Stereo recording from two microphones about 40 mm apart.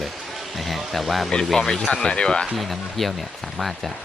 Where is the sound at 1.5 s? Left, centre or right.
Centre.